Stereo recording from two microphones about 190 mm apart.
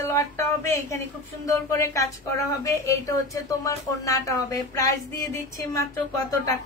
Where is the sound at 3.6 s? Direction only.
15° left (ahead or behind).